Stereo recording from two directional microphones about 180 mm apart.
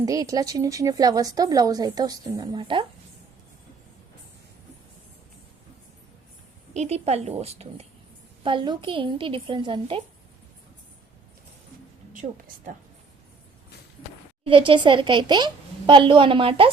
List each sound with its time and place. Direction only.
0.0 s a woman's voice: 20° right (ahead or behind)
6.7 s a woman's voice: 35° right (ahead or behind)
12.2 s a woman's voice: 40° right (ahead or behind)
14.4 s a woman's voice: 30° right (ahead or behind)